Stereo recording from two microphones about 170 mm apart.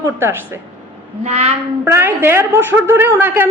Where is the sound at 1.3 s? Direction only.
40° right (ahead or behind).